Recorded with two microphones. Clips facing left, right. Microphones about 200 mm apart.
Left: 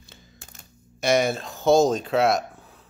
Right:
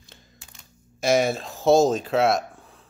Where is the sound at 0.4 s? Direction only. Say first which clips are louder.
Left 3 dB; 45° left (ahead or behind).